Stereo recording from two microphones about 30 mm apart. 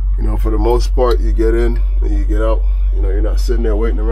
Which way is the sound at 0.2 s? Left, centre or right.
Centre.